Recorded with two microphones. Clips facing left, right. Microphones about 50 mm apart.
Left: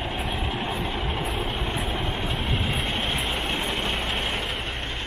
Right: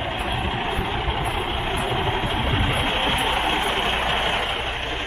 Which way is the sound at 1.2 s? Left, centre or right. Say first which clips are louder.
Right 4 dB; centre.